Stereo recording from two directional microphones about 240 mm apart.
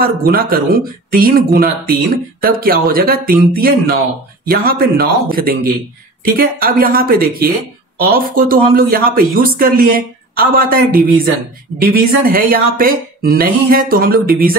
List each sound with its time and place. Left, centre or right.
0.0 s speech: right